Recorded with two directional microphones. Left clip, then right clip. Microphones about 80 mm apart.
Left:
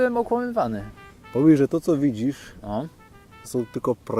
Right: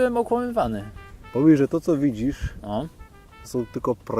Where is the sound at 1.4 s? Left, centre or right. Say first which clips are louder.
Even; left.